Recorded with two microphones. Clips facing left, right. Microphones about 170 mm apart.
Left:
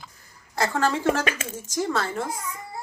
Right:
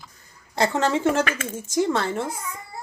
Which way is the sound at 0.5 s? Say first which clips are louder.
Right 2 dB; 20° right (ahead or behind).